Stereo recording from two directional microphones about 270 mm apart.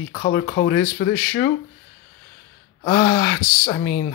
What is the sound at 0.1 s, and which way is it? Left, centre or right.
Speech, left.